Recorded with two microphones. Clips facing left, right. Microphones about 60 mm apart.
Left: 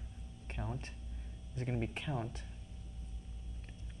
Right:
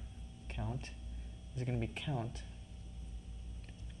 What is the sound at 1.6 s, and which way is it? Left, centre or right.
Speech, centre.